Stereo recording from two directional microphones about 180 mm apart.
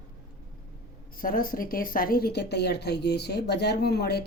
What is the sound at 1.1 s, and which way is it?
A woman's voice, 50° left (ahead or behind).